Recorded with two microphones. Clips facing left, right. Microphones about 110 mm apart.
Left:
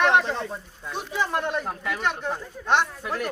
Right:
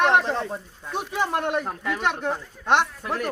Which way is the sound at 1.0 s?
60° right (ahead or behind).